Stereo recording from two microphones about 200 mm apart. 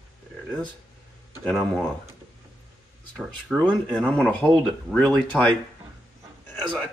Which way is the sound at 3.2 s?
5° left (ahead or behind).